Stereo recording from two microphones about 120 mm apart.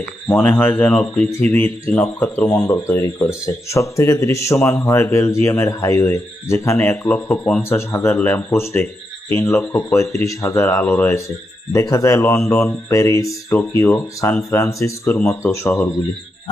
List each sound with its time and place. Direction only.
0.3 s speech: 20° left (ahead or behind)
7.7 s speech: 20° left (ahead or behind)